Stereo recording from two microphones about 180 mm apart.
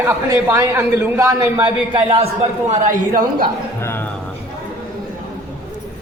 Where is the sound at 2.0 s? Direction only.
35° right (ahead or behind).